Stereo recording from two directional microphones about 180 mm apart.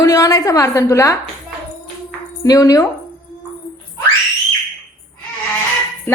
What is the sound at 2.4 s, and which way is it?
Speech, 20° left (ahead or behind).